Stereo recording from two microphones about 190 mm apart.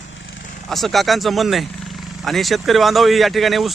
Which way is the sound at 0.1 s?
70° left (ahead or behind).